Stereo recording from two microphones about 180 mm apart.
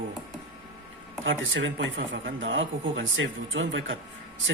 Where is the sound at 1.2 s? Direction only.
90° right.